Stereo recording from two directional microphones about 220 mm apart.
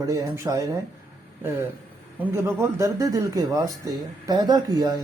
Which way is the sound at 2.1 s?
10° right (ahead or behind).